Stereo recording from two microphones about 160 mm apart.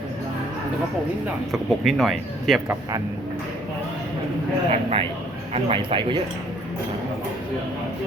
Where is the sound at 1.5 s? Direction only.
Centre (ahead or behind).